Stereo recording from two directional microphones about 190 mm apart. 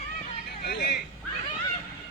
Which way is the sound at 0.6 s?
55° left (ahead or behind).